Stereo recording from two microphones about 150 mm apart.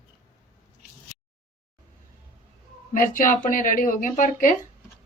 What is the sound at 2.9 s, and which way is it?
Speech, 65° left (ahead or behind).